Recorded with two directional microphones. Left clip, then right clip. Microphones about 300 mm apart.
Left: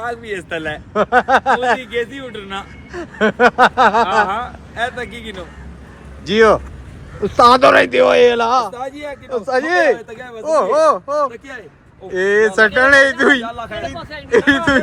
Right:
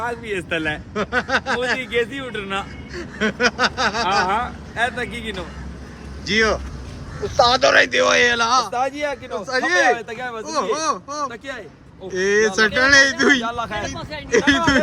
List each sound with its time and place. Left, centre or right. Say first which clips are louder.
0.0 s a man's voice: left 1 dB; centre
8.8 s speech: right 4 dB; right
9.3 s a man's voice: left 5 dB; centre
10.1 s speech: right 3 dB; centre
10.4 s a man's voice: left 10 dB; centre
11.3 s speech: even; centre
12.1 s a man's voice: left 4 dB; centre
13.4 s speech: right 1 dB; centre
13.8 s a man's voice: left 2 dB; centre